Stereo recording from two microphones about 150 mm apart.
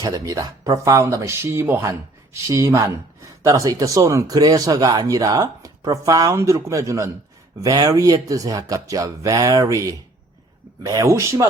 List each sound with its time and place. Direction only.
0.0 s speech: 25° right (ahead or behind)